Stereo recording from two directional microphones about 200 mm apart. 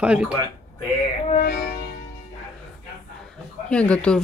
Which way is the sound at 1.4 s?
55° left (ahead or behind).